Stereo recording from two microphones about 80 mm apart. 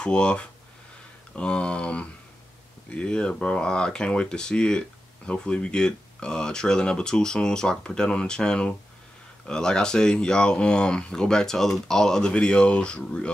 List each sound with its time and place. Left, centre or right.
0.0 s speech: centre